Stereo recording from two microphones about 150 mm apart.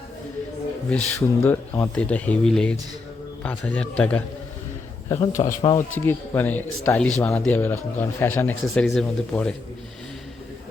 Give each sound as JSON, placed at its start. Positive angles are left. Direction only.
{"t": 0.9, "sound": "speech", "side_deg": 10}
{"t": 5.0, "sound": "a man's voice", "side_deg": 20}
{"t": 5.9, "sound": "speech", "side_deg": 15}
{"t": 8.6, "sound": "speech", "side_deg": 0}